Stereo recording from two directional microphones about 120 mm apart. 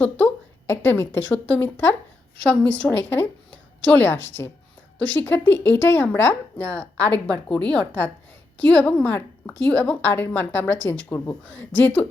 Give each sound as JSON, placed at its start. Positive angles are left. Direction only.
{"t": 0.7, "sound": "a woman's voice", "side_deg": 20}